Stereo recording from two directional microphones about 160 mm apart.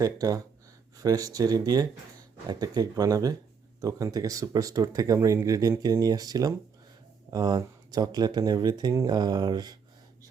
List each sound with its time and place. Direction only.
0.0 s speech: 20° right (ahead or behind)